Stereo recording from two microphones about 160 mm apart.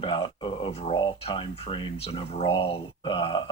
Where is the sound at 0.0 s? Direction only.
30° left (ahead or behind).